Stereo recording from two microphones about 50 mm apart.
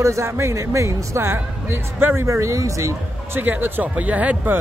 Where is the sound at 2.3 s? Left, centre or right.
Right.